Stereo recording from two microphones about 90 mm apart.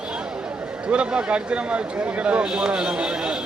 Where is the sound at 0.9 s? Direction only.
10° right (ahead or behind).